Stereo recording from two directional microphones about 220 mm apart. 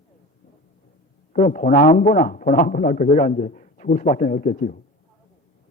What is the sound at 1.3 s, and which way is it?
A man's voice, 35° left (ahead or behind).